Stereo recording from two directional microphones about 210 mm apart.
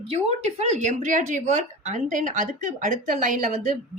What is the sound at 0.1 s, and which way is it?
A woman's voice, 30° right (ahead or behind).